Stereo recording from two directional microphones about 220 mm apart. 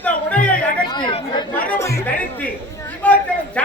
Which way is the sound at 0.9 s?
20° left (ahead or behind).